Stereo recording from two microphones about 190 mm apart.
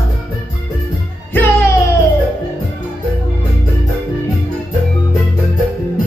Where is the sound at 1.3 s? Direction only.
10° left (ahead or behind).